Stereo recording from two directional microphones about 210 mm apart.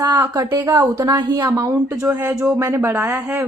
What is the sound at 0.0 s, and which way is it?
Speech, 10° right (ahead or behind).